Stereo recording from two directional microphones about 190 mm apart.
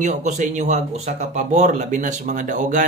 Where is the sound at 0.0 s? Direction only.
40° right (ahead or behind).